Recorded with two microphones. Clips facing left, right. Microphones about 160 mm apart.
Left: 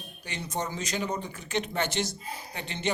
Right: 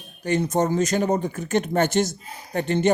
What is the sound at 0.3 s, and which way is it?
Speech, 45° right (ahead or behind).